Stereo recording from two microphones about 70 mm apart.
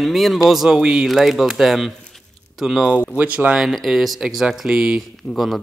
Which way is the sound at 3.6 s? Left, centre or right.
Centre.